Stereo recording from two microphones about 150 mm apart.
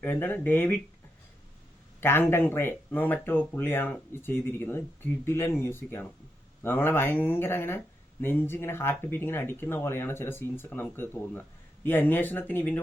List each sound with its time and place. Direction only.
0.0 s speech: 15° left (ahead or behind)
2.0 s a man's voice: 15° left (ahead or behind)